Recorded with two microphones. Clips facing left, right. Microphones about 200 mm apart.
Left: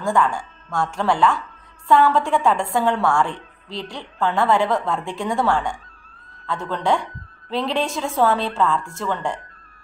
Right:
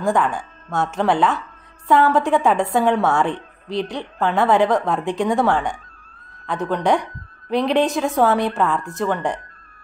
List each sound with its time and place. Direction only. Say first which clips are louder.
0.0 s a woman's voice: right 1 dB; 20° right (ahead or behind)